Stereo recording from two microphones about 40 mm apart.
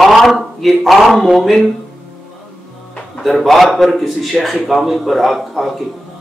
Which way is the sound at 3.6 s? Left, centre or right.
Centre.